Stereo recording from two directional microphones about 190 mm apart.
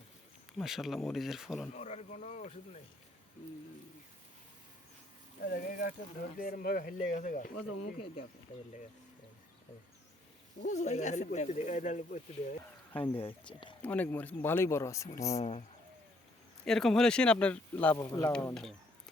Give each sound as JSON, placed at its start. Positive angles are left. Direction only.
{"t": 0.6, "sound": "speech", "side_deg": 0}
{"t": 1.7, "sound": "speech", "side_deg": 35}
{"t": 5.4, "sound": "speech", "side_deg": 45}
{"t": 10.6, "sound": "speech", "side_deg": 40}
{"t": 13.1, "sound": "speech", "side_deg": 25}
{"t": 13.8, "sound": "speech", "side_deg": 10}
{"t": 15.4, "sound": "speech", "side_deg": 35}
{"t": 16.6, "sound": "speech", "side_deg": 5}